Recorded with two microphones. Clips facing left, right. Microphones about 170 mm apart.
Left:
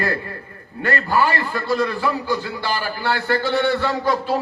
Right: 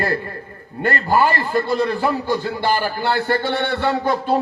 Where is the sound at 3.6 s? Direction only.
55° right (ahead or behind).